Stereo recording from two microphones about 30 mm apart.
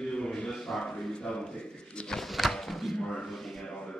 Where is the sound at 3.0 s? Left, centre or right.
Left.